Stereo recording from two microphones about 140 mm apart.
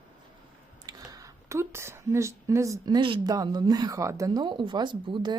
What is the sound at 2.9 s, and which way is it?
Speech, 35° right (ahead or behind).